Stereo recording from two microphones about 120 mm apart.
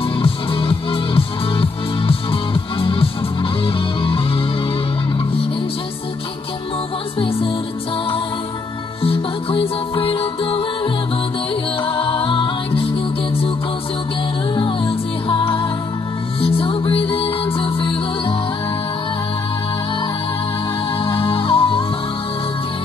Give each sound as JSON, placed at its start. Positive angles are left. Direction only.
{"t": 0.0, "sound": "music", "side_deg": 50}
{"t": 7.2, "sound": "music", "side_deg": 50}
{"t": 9.0, "sound": "music", "side_deg": 50}
{"t": 14.5, "sound": "music", "side_deg": 50}
{"t": 21.0, "sound": "music", "side_deg": 50}